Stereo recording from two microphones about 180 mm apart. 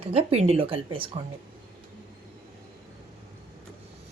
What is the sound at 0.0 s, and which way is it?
Speech, 35° right (ahead or behind).